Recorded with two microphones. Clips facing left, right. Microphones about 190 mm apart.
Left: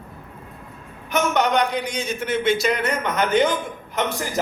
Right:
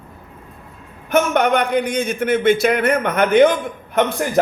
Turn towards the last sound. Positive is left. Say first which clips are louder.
# right 7 dB
turn(degrees=-60)  # may be behind; listen again after turning